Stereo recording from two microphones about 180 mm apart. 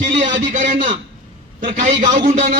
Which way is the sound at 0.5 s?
45° right (ahead or behind).